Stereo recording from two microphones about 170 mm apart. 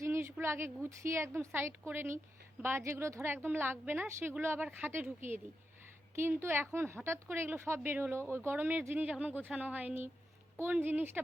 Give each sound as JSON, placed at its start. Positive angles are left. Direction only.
{"t": 0.0, "sound": "a woman's voice", "side_deg": -15}